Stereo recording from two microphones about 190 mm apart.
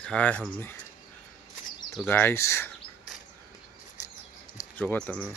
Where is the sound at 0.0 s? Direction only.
5° left (ahead or behind).